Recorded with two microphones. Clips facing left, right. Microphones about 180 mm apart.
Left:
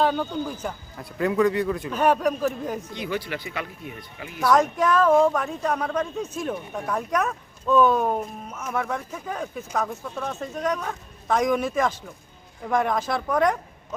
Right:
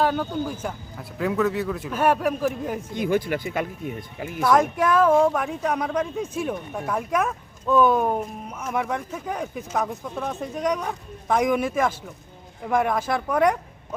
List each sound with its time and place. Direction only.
0.0 s speech: 5° right (ahead or behind)
2.9 s speech: 50° right (ahead or behind)
4.4 s speech: 10° right (ahead or behind)